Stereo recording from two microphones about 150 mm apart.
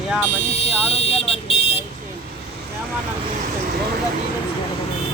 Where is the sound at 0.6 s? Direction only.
40° left (ahead or behind).